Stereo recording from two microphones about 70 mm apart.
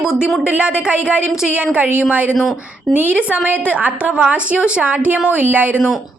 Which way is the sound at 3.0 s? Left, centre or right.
Right.